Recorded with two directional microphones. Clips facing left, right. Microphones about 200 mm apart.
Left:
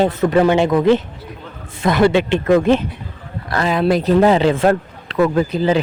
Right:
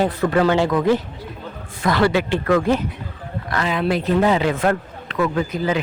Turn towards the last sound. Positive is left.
turn(degrees=30)  # may be behind; listen again after turning